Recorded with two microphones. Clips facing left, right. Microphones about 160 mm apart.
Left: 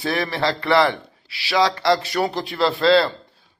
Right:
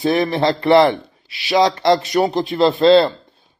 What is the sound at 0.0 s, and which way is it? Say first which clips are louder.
A man's voice: right 6 dB; 20° right (ahead or behind).